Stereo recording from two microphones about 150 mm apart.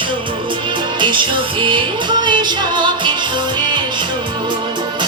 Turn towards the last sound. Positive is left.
turn(degrees=-30)  # may be behind; listen again after turning